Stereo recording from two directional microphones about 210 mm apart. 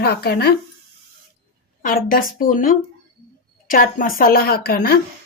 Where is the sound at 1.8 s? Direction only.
40° left (ahead or behind).